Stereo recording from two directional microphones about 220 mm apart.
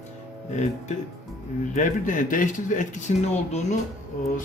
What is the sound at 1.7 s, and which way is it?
Speech, 35° left (ahead or behind).